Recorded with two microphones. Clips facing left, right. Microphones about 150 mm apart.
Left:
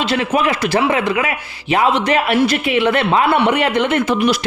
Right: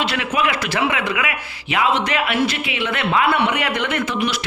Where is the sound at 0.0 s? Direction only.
30° left (ahead or behind).